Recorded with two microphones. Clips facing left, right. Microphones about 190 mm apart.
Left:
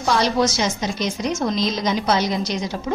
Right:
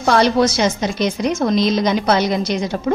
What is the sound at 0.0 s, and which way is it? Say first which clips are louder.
A woman's voice: right 5 dB; 60° right (ahead or behind).